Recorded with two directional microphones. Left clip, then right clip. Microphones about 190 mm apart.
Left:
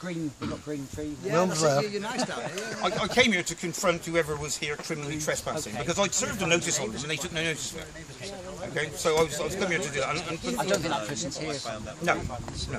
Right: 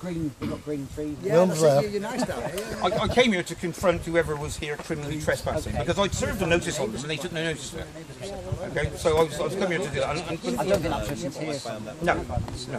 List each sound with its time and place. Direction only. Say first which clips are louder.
1.2 s a man's voice: right 5 dB; 20° right (ahead or behind)
2.8 s speech: right 2 dB; 15° left (ahead or behind)
8.7 s speech: right 2 dB; 15° left (ahead or behind)
10.7 s speech: right 3 dB; 5° right (ahead or behind)